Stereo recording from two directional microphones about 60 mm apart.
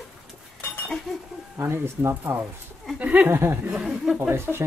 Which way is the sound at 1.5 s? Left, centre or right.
Right.